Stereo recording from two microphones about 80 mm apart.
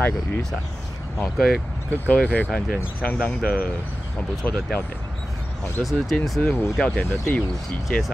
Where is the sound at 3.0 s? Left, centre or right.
Centre.